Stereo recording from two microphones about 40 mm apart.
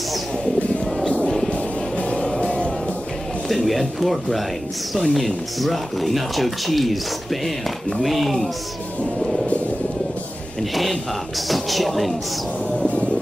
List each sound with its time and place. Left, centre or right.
1.5 s music: left
3.4 s speech: centre
8.0 s speech: centre
10.6 s speech: centre
12.7 s music: left